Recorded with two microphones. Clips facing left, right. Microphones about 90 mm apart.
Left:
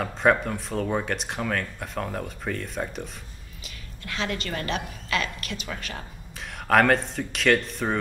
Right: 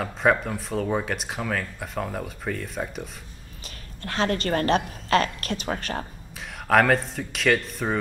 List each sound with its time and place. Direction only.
0.0 s speech: centre (ahead or behind)
3.6 s a woman's voice: 40° right (ahead or behind)
6.7 s speech: centre (ahead or behind)